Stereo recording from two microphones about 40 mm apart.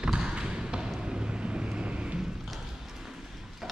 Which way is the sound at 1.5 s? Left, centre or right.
Right.